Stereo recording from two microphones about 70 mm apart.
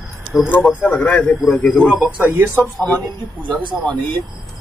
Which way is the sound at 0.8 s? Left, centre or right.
Left.